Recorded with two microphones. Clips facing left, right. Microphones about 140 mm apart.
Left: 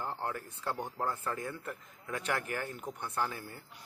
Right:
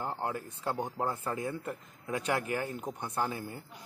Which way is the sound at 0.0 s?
20° right (ahead or behind).